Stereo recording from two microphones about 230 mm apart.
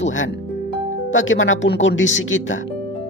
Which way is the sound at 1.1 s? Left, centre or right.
Left.